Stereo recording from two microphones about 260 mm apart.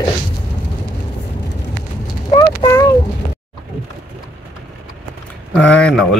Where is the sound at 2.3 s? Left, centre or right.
Centre.